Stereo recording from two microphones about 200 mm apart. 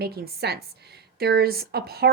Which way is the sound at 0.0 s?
50° right (ahead or behind).